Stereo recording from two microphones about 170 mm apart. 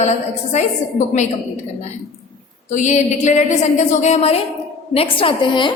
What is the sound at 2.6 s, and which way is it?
A woman's voice, 45° left (ahead or behind).